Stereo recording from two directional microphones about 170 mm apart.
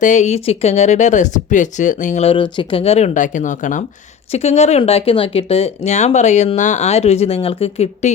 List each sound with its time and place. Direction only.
0.0 s speech: 45° left (ahead or behind)